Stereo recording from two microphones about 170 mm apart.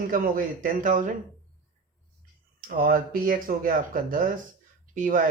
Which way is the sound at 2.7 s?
55° right (ahead or behind).